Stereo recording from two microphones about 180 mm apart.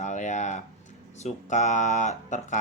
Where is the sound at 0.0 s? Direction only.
40° left (ahead or behind).